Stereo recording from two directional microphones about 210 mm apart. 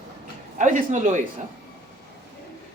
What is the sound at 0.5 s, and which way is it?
Speech, 35° right (ahead or behind).